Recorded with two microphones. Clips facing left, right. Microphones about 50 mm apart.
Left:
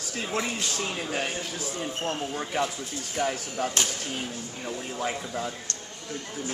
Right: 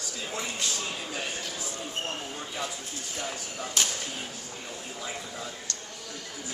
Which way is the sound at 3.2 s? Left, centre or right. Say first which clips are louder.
Left 9 dB; left.